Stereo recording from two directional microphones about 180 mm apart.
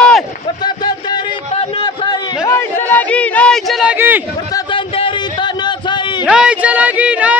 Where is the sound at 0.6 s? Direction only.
25° left (ahead or behind).